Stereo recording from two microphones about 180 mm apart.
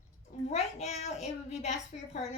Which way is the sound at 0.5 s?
40° left (ahead or behind).